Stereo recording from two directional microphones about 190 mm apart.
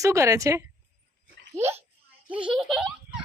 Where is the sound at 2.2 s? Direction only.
25° right (ahead or behind).